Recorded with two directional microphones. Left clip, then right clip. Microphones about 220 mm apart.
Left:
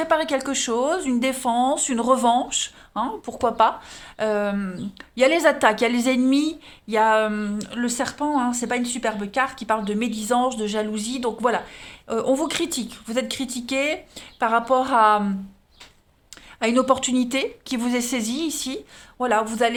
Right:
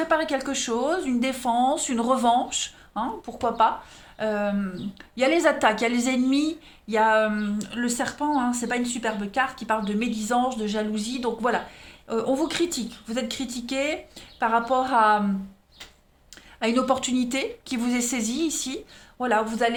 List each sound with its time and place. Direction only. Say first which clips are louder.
0.0 s a woman's voice: left 2 dB; 30° left (ahead or behind)
16.6 s a woman's voice: left 4 dB; 30° left (ahead or behind)